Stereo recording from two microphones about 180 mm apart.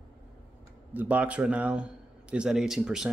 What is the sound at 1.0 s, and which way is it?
A man's voice, 10° right (ahead or behind).